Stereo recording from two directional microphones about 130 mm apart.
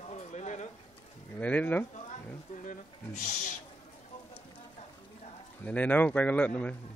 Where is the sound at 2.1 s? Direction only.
80° left.